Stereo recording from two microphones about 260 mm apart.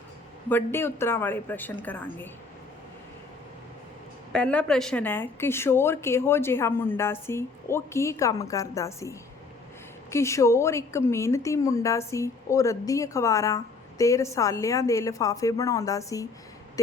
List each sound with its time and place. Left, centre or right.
0.4 s a woman's voice: centre
4.3 s a woman's voice: centre